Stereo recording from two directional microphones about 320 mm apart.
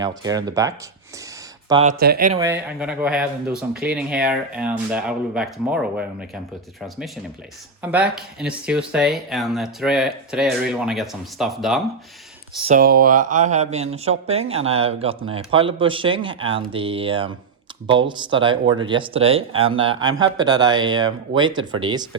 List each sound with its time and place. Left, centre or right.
0.0 s speech: centre
1.7 s speech: right
2.4 s speech: centre
12.5 s speech: right